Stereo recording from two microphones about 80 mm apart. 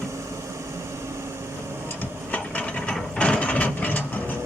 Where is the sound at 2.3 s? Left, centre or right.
Centre.